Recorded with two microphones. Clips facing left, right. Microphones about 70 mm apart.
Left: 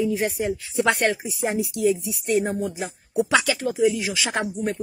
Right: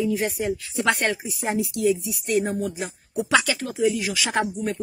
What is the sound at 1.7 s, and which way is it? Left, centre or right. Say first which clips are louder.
Speech: even; centre.